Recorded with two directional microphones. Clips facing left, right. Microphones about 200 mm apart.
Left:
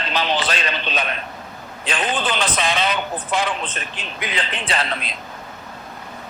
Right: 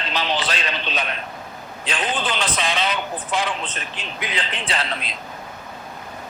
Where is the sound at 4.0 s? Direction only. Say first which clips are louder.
Left 1 dB; 50° left (ahead or behind).